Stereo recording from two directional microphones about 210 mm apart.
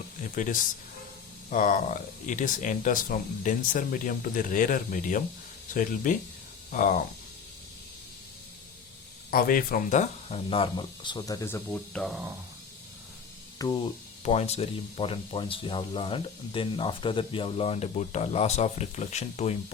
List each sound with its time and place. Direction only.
0.3 s speech: 35° left (ahead or behind)
9.3 s speech: 40° left (ahead or behind); by 12.2 s 5° left (ahead or behind)
13.6 s speech: 25° left (ahead or behind)